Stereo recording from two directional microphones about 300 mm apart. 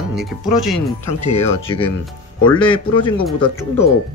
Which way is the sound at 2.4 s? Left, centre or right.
Centre.